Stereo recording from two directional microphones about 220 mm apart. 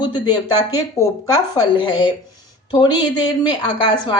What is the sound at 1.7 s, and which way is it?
Speech, 20° left (ahead or behind).